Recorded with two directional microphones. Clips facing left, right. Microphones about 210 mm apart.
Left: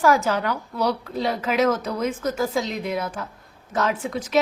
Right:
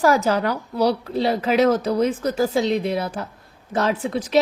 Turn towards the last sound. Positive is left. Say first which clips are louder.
# right 3 dB
turn(degrees=-35)  # may be behind; listen again after turning